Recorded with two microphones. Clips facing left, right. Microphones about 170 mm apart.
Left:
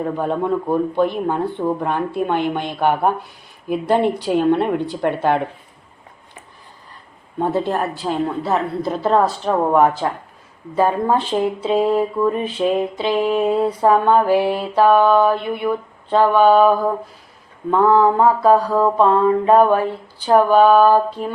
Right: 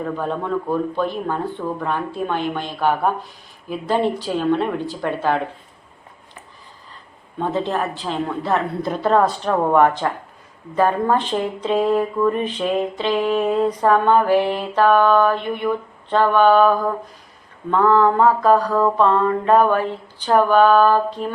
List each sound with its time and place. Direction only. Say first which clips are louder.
0.0 s speech: left 3 dB; 15° left (ahead or behind)
7.3 s speech: left 2 dB; 10° left (ahead or behind)